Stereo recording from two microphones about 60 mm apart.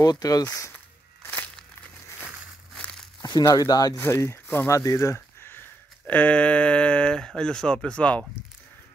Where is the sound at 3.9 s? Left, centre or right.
Left.